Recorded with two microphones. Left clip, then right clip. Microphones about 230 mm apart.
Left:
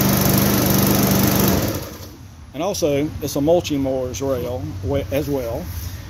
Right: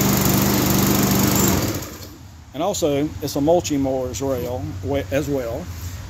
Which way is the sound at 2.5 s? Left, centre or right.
Centre.